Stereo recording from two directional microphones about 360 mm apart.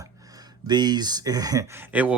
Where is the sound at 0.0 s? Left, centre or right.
Centre.